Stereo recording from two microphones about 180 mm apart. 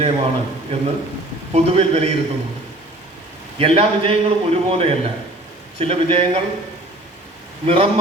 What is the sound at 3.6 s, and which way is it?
A man's voice, 35° right (ahead or behind).